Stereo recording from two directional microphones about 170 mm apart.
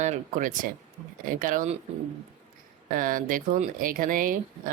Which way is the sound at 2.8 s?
55° right (ahead or behind).